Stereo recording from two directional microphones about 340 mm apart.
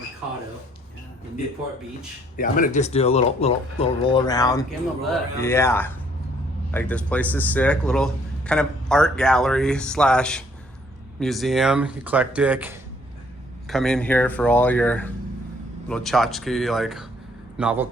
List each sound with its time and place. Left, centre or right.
2.3 s speech: left; by 17.8 s centre